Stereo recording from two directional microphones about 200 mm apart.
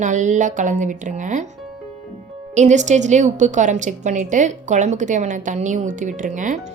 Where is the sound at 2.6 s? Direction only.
35° right (ahead or behind).